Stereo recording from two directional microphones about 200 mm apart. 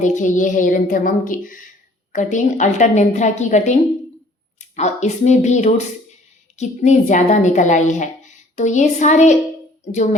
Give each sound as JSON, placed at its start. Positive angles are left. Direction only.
{"t": 0.0, "sound": "a woman's voice", "side_deg": 40}